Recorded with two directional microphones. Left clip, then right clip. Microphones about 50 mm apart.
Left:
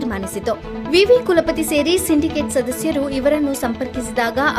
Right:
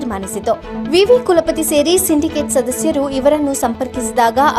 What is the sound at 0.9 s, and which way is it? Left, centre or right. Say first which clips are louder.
A woman's voice: right 2 dB; right.